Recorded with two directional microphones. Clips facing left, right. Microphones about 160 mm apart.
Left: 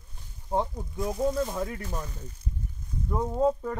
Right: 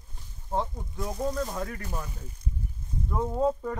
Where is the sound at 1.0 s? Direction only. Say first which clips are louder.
Left 3 dB; centre (ahead or behind).